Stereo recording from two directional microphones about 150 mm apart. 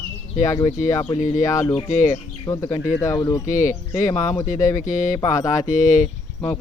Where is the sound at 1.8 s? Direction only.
55° left (ahead or behind).